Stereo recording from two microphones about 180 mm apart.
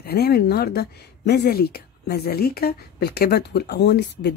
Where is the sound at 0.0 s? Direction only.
60° left (ahead or behind).